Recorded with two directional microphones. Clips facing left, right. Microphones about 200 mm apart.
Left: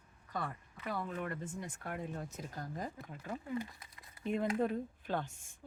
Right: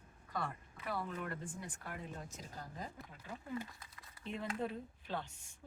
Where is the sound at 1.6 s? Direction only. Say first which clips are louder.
Left 5 dB; 50° left (ahead or behind).